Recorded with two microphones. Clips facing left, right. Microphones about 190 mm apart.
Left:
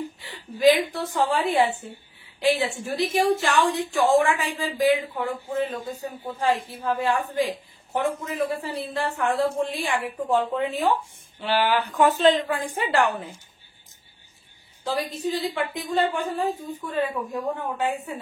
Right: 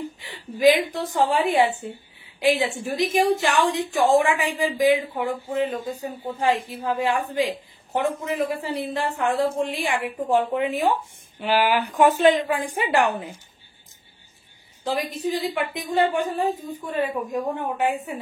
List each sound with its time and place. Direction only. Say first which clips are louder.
0.2 s a woman's voice: right 1 dB; 15° right (ahead or behind)
14.9 s a woman's voice: right 1 dB; 15° right (ahead or behind)